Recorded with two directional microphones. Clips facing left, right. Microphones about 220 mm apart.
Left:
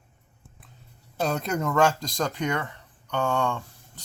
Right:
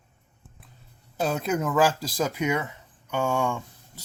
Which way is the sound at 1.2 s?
5° right (ahead or behind).